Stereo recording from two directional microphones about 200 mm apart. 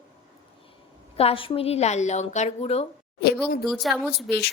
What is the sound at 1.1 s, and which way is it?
A woman's voice, 30° left (ahead or behind).